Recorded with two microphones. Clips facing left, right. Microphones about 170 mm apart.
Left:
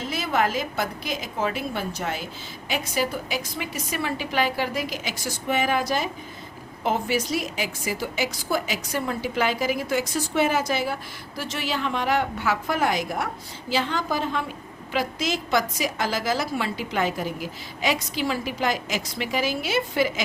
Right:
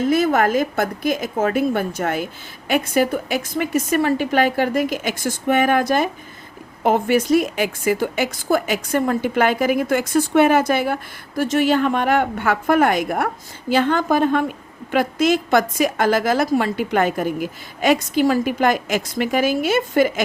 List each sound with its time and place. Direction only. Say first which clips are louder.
0.0 s a woman's voice: right 8 dB; 50° right (ahead or behind)